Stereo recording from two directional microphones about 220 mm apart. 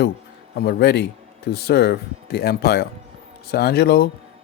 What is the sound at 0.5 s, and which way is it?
Speech, 45° left (ahead or behind).